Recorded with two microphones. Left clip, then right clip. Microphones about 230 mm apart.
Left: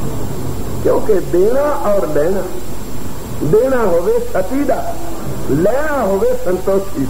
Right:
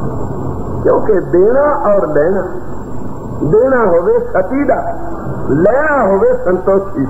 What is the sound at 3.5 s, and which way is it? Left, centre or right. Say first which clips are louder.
Speech: right 3 dB; right.